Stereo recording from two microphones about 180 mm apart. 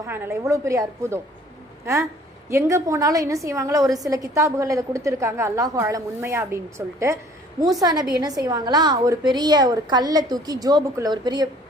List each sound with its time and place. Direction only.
0.0 s a woman's voice: 15° right (ahead or behind)